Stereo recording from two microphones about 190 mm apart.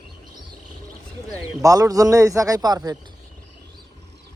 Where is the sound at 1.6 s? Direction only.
20° right (ahead or behind).